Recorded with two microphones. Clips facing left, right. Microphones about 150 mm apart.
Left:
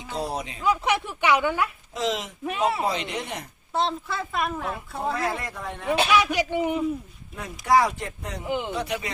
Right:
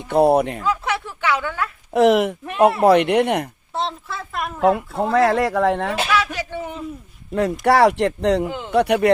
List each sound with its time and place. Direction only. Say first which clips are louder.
0.1 s speech: right 15 dB; 60° right (ahead or behind)
0.6 s a sound: right 1 dB; 15° left (ahead or behind)
1.9 s speech: right 13 dB; 65° right (ahead or behind)
3.8 s a woman's voice: even; centre (ahead or behind)
4.6 s a woman's voice: right 11 dB; 80° right
6.1 s speech: even; 15° left (ahead or behind)
7.6 s speech: right 5 dB; 70° right (ahead or behind)
8.4 s speech: left 1 dB; 15° left (ahead or behind)
8.7 s speech: right 14 dB; 65° right (ahead or behind)